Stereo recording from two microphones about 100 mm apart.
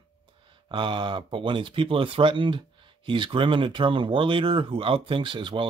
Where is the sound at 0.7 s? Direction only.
55° right (ahead or behind).